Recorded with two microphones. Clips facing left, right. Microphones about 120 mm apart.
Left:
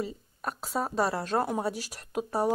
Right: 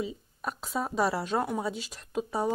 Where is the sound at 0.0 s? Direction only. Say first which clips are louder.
Even; centre (ahead or behind).